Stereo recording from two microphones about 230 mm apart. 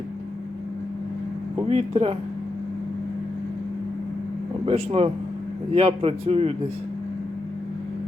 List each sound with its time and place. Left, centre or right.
1.7 s a man's voice: right
4.6 s a man's voice: right